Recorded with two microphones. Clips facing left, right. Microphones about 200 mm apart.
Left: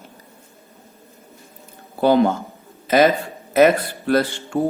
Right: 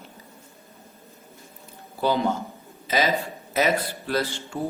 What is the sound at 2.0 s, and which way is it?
A man's voice, 55° left (ahead or behind).